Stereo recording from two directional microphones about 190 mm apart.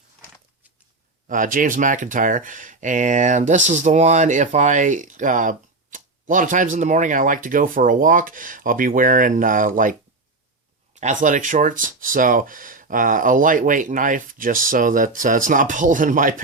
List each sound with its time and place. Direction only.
1.3 s speech: 45° right (ahead or behind)
11.0 s speech: 40° right (ahead or behind)